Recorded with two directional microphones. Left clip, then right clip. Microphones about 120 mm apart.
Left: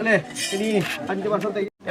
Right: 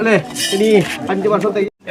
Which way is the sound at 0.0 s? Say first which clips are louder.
Right 6 dB; centre (ahead or behind).